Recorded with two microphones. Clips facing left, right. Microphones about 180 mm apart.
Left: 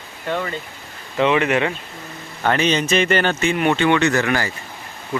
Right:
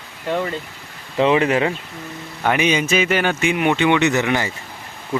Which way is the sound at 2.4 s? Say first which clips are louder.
Even; 10° right (ahead or behind).